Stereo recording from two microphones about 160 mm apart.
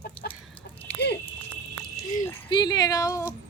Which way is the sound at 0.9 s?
90° left.